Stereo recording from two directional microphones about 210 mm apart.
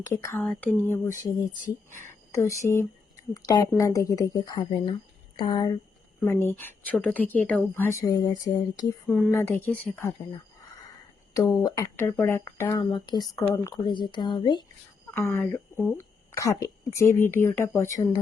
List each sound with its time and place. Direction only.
0.0 s speech: 15° left (ahead or behind)
11.3 s speech: 20° left (ahead or behind)
15.1 s speech: 10° left (ahead or behind)